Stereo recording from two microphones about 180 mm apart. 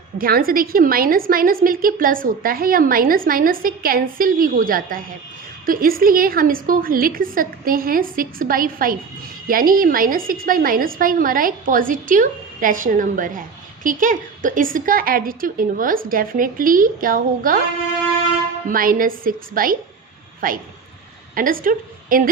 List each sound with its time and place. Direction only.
0.2 s a woman's voice: 55° right (ahead or behind)
18.7 s a woman's voice: 50° right (ahead or behind)